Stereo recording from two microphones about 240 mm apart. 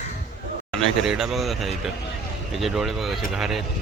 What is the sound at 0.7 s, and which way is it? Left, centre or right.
Speech, centre.